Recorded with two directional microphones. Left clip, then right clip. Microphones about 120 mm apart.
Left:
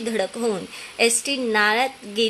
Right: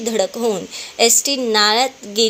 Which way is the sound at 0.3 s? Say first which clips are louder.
Right 5 dB; centre (ahead or behind).